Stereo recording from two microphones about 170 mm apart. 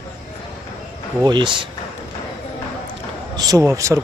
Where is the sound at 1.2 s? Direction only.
25° right (ahead or behind).